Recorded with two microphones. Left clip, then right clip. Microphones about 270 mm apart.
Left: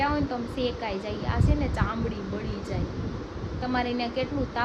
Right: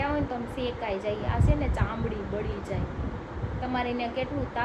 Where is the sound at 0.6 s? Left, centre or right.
Centre.